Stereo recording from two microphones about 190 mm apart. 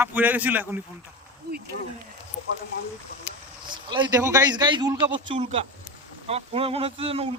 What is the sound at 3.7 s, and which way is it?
A man's voice, 25° right (ahead or behind).